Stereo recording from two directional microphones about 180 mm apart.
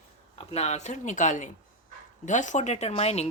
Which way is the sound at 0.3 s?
35° left (ahead or behind).